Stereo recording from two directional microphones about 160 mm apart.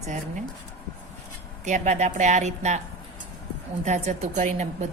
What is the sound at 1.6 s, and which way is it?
Speech, 50° right (ahead or behind).